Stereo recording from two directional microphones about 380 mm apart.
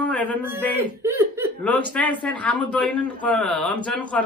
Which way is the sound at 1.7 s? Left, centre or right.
Centre.